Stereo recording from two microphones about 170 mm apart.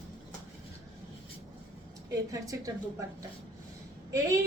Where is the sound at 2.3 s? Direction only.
20° right (ahead or behind).